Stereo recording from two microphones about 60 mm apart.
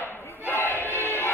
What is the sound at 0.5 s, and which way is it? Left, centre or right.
Music, left.